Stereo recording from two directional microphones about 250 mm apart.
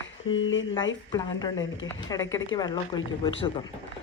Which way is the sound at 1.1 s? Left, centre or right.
Centre.